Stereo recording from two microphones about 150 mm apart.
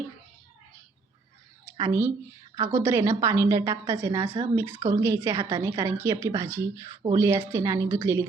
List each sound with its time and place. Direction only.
1.9 s a woman's voice: 15° right (ahead or behind)